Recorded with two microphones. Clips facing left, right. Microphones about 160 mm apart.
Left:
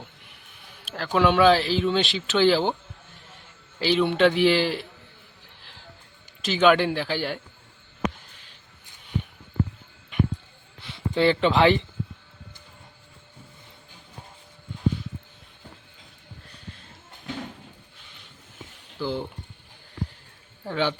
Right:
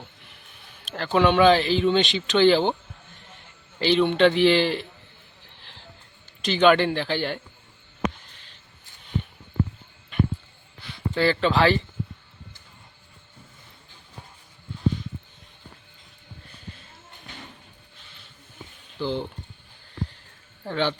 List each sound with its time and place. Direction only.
0.9 s speech: 5° left (ahead or behind)
3.8 s a man's voice: 5° left (ahead or behind)
6.4 s a man's voice: 5° left (ahead or behind)
10.8 s speech: 20° left (ahead or behind)
18.9 s a man's voice: 10° left (ahead or behind)
20.7 s a man's voice: 10° left (ahead or behind)